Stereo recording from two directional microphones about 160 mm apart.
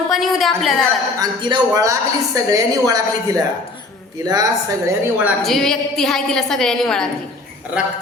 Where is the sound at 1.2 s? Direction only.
25° right (ahead or behind).